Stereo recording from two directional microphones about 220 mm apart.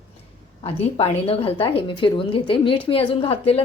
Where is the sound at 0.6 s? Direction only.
25° left (ahead or behind).